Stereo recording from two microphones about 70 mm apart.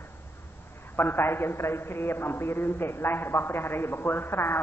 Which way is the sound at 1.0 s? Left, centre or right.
Left.